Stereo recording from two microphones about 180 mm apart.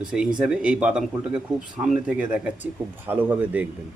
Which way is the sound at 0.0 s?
5° right (ahead or behind).